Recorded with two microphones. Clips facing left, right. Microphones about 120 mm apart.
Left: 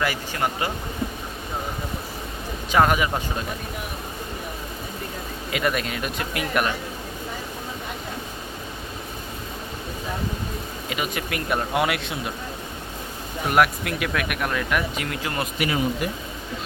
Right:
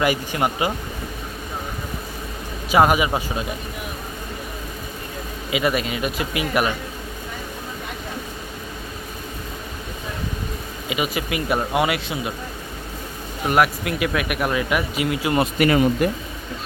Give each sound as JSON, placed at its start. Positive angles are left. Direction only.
{"t": 0.0, "sound": "speech", "side_deg": -15}
{"t": 2.7, "sound": "speech", "side_deg": -10}
{"t": 5.5, "sound": "speech", "side_deg": -5}
{"t": 10.8, "sound": "speech", "side_deg": -5}
{"t": 13.5, "sound": "speech", "side_deg": 0}
{"t": 15.5, "sound": "speech", "side_deg": -60}